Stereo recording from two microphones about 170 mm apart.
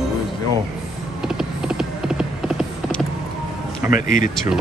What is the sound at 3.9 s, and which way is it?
Speech, 50° left (ahead or behind).